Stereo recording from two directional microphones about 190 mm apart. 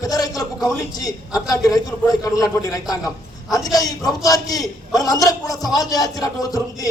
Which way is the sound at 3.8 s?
20° left (ahead or behind).